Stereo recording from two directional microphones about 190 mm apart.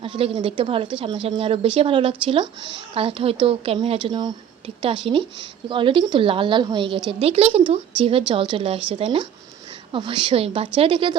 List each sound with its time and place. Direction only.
0.0 s a woman's voice: 30° right (ahead or behind)